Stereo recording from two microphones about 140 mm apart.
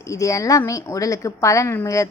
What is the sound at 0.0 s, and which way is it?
A woman's voice, 20° left (ahead or behind).